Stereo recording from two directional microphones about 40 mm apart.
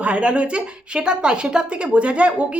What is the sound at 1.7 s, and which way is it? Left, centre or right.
Speech, right.